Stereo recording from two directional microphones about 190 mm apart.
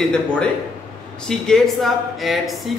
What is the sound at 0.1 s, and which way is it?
A man's voice, 5° left (ahead or behind).